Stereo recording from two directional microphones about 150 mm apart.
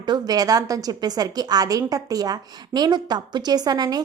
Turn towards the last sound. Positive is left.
turn(degrees=-25)  # may be behind; listen again after turning